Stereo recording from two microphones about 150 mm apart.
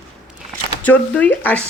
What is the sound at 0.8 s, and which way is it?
Speech, 10° left (ahead or behind).